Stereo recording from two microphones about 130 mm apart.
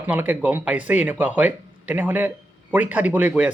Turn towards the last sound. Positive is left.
turn(degrees=-10)  # may be behind; listen again after turning